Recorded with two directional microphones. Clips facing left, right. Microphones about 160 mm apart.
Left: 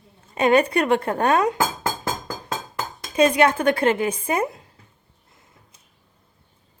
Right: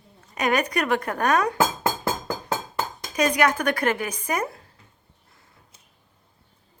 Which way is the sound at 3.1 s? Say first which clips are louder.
Left 4 dB; 25° left (ahead or behind).